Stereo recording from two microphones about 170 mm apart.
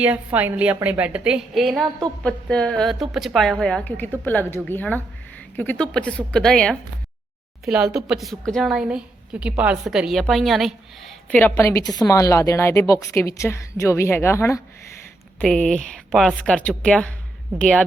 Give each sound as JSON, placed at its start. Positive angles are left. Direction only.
{"t": 0.0, "sound": "a woman's voice", "side_deg": -10}
{"t": 11.3, "sound": "a woman's voice", "side_deg": 10}
{"t": 15.4, "sound": "a woman's voice", "side_deg": 5}